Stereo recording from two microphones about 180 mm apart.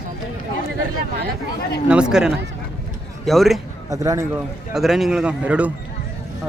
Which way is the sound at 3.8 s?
20° right (ahead or behind).